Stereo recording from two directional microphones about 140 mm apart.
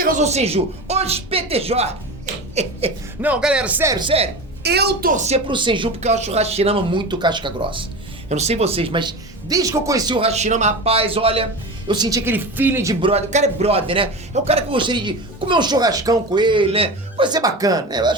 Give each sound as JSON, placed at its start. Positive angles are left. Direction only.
{"t": 0.0, "sound": "a man's voice", "side_deg": -65}
{"t": 3.2, "sound": "speech", "side_deg": -10}
{"t": 3.8, "sound": "speech", "side_deg": -30}
{"t": 4.9, "sound": "speech", "side_deg": -90}
{"t": 5.5, "sound": "speech", "side_deg": -35}
{"t": 6.0, "sound": "speech", "side_deg": -55}
{"t": 8.3, "sound": "speech", "side_deg": -50}
{"t": 10.2, "sound": "a man's voice", "side_deg": -50}
{"t": 11.9, "sound": "a woman's voice", "side_deg": -30}
{"t": 12.2, "sound": "speech", "side_deg": -15}
{"t": 12.9, "sound": "a man's voice", "side_deg": -40}